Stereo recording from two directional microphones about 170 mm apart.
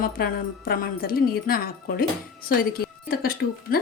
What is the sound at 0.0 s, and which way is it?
A woman's voice, 60° left (ahead or behind).